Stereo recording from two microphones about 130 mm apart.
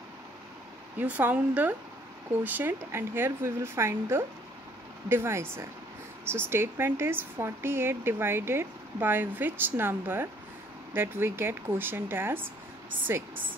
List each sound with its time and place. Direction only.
0.9 s speech: 15° right (ahead or behind)